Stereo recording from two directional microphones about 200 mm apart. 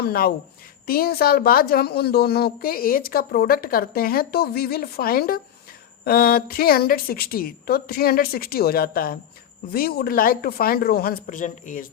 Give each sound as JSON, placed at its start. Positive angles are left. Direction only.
{"t": 0.0, "sound": "a woman's voice", "side_deg": 50}